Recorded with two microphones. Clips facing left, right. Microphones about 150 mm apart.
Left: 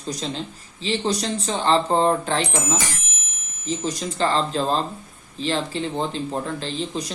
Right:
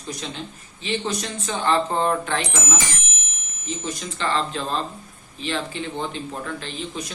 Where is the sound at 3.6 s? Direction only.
35° left (ahead or behind).